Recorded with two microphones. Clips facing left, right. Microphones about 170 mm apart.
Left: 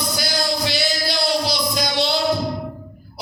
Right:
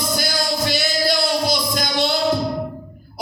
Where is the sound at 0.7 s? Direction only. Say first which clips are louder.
Right 3 dB; 50° right (ahead or behind).